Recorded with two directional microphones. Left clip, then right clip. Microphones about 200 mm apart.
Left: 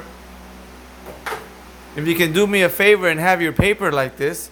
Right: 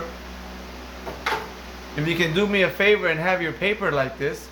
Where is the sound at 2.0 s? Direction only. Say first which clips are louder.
Left 5 dB; 55° left (ahead or behind).